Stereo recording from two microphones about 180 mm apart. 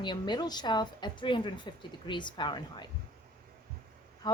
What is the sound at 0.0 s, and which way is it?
A woman's voice, 25° left (ahead or behind).